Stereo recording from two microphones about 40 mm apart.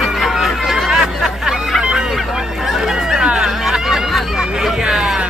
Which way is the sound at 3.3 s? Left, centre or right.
Centre.